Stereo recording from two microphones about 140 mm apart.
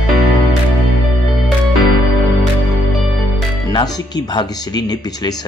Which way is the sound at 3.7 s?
30° left (ahead or behind).